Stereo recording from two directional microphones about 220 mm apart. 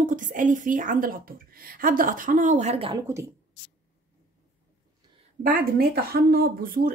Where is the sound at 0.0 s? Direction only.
35° right (ahead or behind).